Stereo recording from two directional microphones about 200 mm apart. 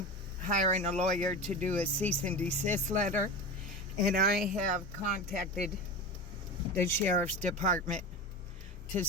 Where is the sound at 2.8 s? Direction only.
40° right (ahead or behind).